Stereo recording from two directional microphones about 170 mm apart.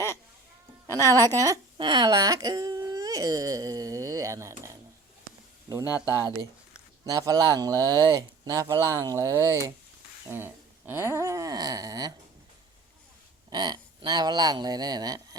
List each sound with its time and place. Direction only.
1.0 s speech: 20° right (ahead or behind)
5.9 s speech: 20° right (ahead or behind)
13.5 s speech: 25° right (ahead or behind)